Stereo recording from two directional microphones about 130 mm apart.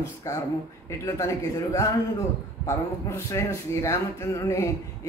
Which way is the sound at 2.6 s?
20° left (ahead or behind).